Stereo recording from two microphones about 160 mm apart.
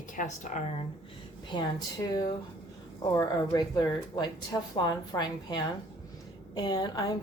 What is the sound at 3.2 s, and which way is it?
A woman's voice, 25° left (ahead or behind).